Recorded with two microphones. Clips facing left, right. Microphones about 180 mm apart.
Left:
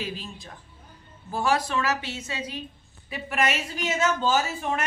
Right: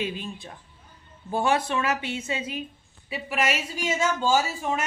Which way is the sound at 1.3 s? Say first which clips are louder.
Right 1 dB; 25° right (ahead or behind).